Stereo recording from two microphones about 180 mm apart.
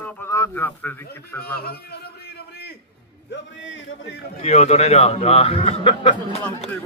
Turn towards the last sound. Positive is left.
turn(degrees=25)  # may be behind; listen again after turning